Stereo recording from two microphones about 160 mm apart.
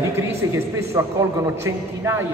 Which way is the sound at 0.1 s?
15° right (ahead or behind).